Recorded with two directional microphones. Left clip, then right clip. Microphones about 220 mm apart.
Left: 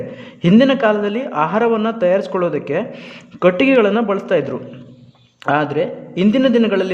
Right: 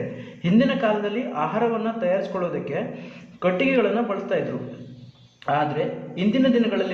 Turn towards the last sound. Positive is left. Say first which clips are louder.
# left 6 dB
turn(degrees=55)  # may be behind; listen again after turning